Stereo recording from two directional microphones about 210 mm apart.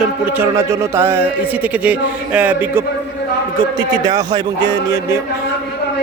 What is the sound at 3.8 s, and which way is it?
Speech, 20° right (ahead or behind).